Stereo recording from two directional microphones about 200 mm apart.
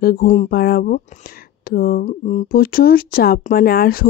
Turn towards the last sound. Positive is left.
turn(degrees=50)  # may be behind; listen again after turning